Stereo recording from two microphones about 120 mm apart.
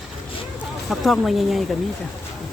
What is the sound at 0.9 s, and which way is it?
Speech, centre (ahead or behind).